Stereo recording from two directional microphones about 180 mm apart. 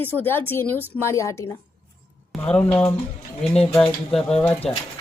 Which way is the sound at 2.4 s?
5° left (ahead or behind).